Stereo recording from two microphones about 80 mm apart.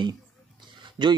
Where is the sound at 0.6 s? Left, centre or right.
Right.